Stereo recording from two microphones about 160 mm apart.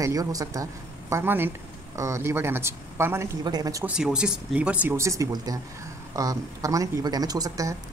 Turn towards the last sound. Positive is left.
turn(degrees=-20)  # may be behind; listen again after turning